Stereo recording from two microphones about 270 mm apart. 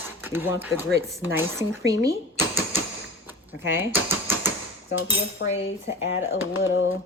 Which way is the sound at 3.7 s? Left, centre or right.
Centre.